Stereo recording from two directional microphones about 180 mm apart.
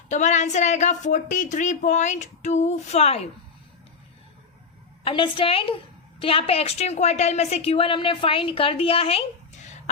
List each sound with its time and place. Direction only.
0.1 s a woman's voice: 40° left (ahead or behind)
5.0 s a woman's voice: 30° left (ahead or behind)